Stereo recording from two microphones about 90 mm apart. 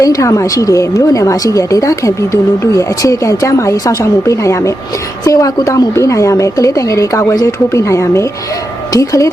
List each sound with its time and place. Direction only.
0.0 s a woman's voice: 40° left (ahead or behind)